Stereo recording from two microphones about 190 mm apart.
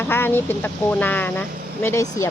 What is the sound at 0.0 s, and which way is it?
Speech, 10° left (ahead or behind).